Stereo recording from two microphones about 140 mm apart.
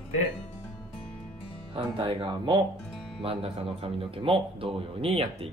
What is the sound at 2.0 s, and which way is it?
Speech, 35° right (ahead or behind).